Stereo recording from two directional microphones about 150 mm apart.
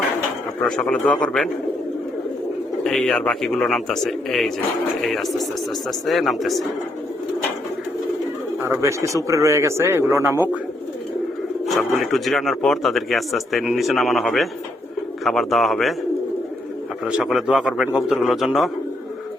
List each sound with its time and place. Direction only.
0.6 s a man's voice: 5° left (ahead or behind)
2.8 s speech: 5° left (ahead or behind)
8.6 s a man's voice: 20° right (ahead or behind)
11.6 s speech: centre (ahead or behind)
17.1 s speech: centre (ahead or behind)